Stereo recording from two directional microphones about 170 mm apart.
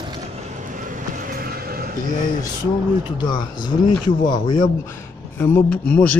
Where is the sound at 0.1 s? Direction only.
40° right (ahead or behind); by 1.9 s 60° right (ahead or behind).